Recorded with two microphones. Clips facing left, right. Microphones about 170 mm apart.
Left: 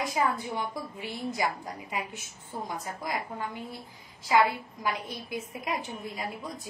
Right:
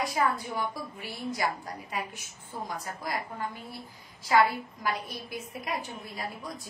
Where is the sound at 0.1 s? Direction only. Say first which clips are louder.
Even; 20° left (ahead or behind).